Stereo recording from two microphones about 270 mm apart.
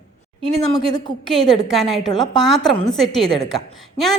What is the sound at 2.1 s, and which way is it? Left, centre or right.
Speech, centre.